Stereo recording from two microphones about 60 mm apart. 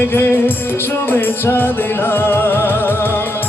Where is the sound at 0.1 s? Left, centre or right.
Left.